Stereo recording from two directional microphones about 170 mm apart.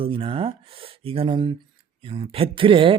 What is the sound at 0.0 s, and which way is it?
Speech, 35° right (ahead or behind).